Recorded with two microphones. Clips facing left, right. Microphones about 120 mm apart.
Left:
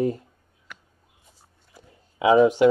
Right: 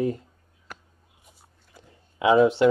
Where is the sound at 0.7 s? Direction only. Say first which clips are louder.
Right 3 dB; 40° right (ahead or behind).